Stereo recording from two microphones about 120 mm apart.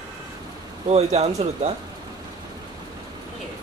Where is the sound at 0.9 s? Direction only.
65° right (ahead or behind).